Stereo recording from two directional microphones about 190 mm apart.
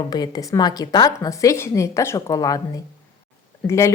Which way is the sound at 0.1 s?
20° left (ahead or behind).